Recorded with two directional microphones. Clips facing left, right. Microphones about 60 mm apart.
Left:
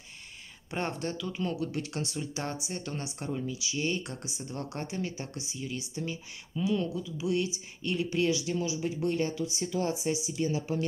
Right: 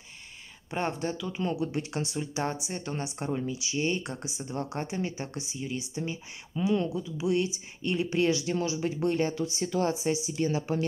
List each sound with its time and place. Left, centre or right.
0.7 s speech: centre
1.4 s speech: right
4.0 s speech: centre; by 10.8 s right